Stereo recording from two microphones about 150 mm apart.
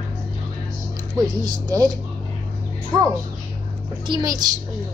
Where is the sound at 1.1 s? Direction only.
30° right (ahead or behind).